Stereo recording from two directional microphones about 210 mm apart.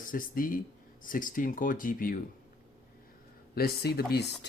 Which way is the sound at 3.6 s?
50° left (ahead or behind).